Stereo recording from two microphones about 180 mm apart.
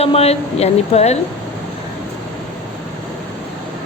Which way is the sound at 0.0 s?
35° left (ahead or behind).